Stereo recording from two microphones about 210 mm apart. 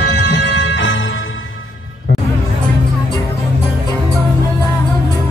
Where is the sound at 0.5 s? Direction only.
60° left (ahead or behind).